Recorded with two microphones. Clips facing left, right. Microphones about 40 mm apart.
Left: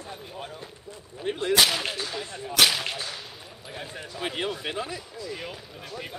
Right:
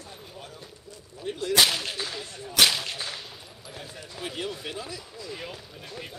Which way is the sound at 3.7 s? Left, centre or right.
Left.